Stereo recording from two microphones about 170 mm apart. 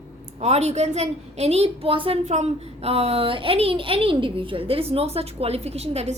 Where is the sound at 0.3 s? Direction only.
40° right (ahead or behind).